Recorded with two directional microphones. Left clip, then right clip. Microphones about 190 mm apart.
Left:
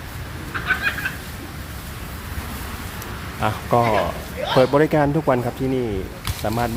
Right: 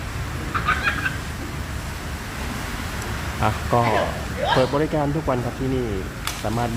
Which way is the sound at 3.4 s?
15° left (ahead or behind).